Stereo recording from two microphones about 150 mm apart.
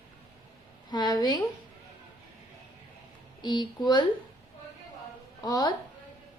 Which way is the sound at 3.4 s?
30° left (ahead or behind).